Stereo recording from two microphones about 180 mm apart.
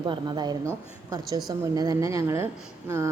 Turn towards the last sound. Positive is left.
turn(degrees=-15)  # may be behind; listen again after turning